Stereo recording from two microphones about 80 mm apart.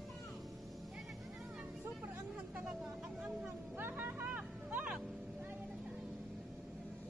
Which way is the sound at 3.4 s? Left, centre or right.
Right.